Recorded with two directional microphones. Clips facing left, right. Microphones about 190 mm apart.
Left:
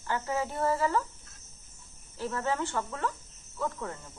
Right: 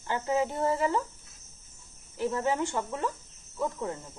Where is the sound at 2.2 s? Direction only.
15° right (ahead or behind).